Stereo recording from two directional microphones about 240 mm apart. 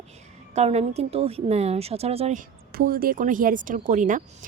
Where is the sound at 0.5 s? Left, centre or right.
Right.